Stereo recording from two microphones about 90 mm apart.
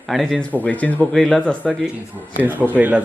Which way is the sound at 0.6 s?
15° left (ahead or behind).